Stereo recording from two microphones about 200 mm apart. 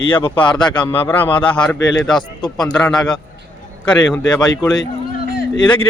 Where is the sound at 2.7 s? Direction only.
5° left (ahead or behind).